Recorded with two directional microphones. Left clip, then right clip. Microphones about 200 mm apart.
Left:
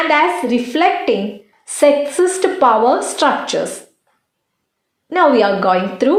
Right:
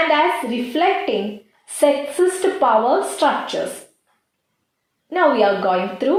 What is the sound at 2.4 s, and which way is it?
A woman's voice, 45° left (ahead or behind).